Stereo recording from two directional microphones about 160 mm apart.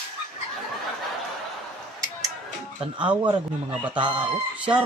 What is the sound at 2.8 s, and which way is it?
Speech, 30° right (ahead or behind).